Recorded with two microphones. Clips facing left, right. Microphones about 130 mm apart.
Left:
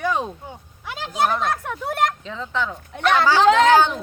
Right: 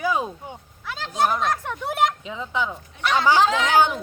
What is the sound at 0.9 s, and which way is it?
Speech, 15° left (ahead or behind).